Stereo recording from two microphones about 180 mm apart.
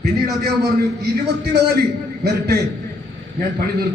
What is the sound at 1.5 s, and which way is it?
A man's voice, 60° right (ahead or behind).